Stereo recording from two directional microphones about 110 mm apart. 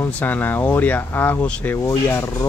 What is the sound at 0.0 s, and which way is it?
Speech, 15° left (ahead or behind).